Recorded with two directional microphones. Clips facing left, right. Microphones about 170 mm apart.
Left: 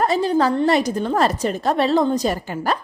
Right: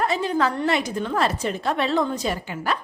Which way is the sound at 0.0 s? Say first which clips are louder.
Left 4 dB; 35° left (ahead or behind).